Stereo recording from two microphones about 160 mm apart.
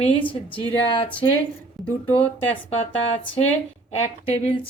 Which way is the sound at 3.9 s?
40° left (ahead or behind).